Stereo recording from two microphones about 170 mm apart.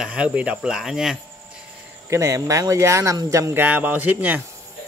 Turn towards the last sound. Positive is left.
turn(degrees=-10)  # may be behind; listen again after turning